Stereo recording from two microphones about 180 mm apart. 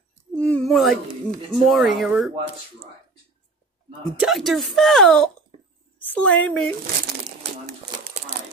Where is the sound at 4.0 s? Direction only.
Centre (ahead or behind).